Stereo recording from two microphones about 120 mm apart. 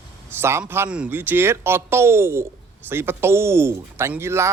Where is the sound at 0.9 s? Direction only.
10° right (ahead or behind).